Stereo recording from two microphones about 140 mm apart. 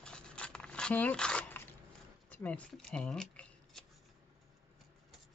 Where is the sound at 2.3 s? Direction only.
10° left (ahead or behind).